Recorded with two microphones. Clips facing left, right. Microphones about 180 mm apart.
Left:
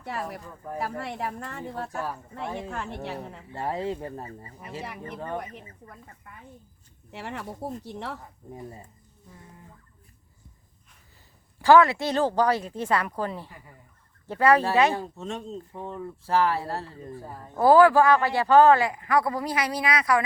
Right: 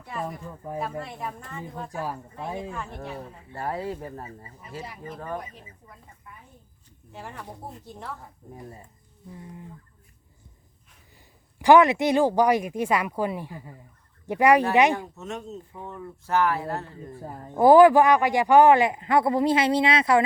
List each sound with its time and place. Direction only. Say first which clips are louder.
0.0 s speech: even; 75° left (ahead or behind)
3.5 s speech: left 1 dB; 25° left (ahead or behind)
4.8 s speech: even; 65° left (ahead or behind)
7.1 s speech: left 4 dB; 75° left (ahead or behind)
11.6 s speech: right 1 dB; 15° right (ahead or behind)
14.9 s speech: left 1 dB; 30° left (ahead or behind)
17.2 s speech: right 4 dB; 25° right (ahead or behind)